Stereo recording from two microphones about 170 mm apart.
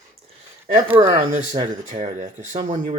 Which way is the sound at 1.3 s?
45° right (ahead or behind).